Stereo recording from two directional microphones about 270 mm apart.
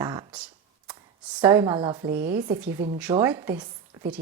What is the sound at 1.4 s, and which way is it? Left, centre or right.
A woman's voice, centre.